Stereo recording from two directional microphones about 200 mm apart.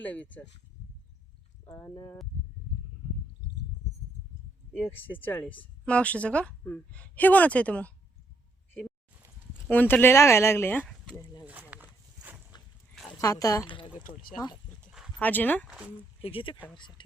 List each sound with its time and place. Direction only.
0.0 s a woman's voice: 5° left (ahead or behind)
1.6 s a woman's voice: 10° left (ahead or behind)
5.2 s a woman's voice: 10° left (ahead or behind)
9.6 s a woman's voice: 10° left (ahead or behind)
11.4 s a sound: 10° right (ahead or behind)
13.1 s speech: 15° left (ahead or behind)
15.2 s a woman's voice: 10° left (ahead or behind)
16.2 s speech: 25° left (ahead or behind)